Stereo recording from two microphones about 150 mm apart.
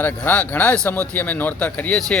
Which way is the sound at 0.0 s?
10° left (ahead or behind).